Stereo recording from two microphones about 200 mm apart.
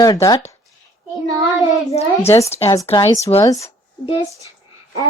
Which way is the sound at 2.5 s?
30° left (ahead or behind).